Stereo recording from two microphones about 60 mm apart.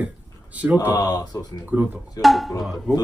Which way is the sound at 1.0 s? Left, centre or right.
Left.